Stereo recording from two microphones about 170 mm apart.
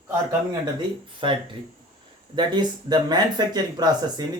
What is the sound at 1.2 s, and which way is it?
Speech, 30° right (ahead or behind).